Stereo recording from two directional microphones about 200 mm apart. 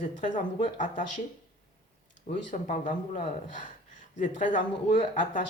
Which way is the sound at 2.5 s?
35° left (ahead or behind).